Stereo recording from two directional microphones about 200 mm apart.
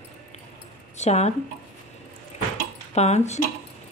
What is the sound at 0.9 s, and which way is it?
Speech, 35° left (ahead or behind).